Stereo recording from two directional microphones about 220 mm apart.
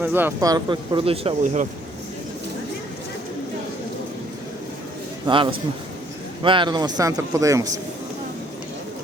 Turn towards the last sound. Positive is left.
turn(degrees=-15)  # may be behind; listen again after turning